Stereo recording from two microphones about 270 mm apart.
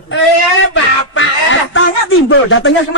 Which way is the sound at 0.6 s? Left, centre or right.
Left.